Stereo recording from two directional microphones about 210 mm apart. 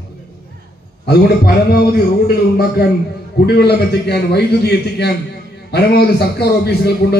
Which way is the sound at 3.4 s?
50° left (ahead or behind).